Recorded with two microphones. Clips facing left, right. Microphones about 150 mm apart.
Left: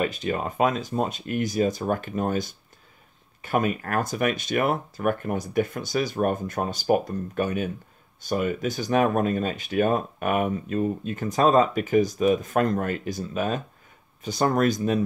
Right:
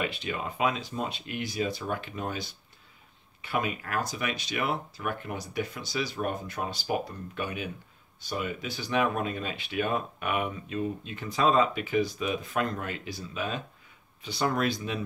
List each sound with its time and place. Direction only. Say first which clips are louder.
0.0 s speech: left 6 dB; 45° left (ahead or behind)